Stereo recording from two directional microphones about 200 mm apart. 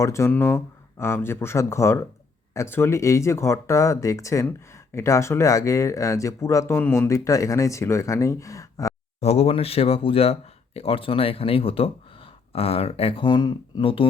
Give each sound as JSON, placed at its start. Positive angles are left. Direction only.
{"t": 0.0, "sound": "speech", "side_deg": 15}
{"t": 9.2, "sound": "speech", "side_deg": 30}